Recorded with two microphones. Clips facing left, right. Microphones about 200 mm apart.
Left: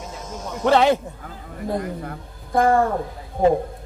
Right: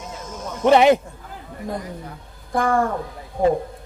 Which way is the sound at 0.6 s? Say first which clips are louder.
Right 3 dB; 15° right (ahead or behind).